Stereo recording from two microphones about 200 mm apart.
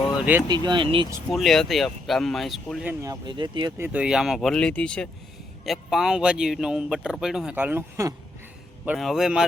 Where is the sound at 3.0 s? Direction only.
20° right (ahead or behind).